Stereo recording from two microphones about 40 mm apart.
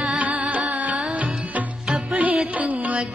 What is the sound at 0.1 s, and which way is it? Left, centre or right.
Music, right.